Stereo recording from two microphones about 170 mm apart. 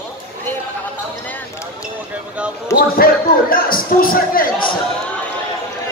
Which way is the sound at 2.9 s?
60° left (ahead or behind).